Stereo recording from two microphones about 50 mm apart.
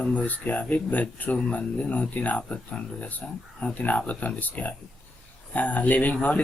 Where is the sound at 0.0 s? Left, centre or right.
Left.